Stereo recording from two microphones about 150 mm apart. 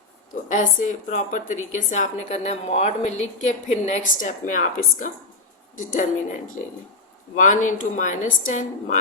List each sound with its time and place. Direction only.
0.4 s a woman's voice: 60° left (ahead or behind)
7.3 s a woman's voice: 55° left (ahead or behind)